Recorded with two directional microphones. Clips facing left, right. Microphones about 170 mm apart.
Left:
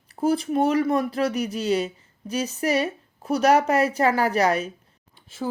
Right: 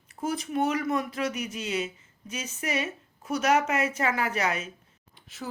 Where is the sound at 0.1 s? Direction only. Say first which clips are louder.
Left 8 dB; 30° left (ahead or behind).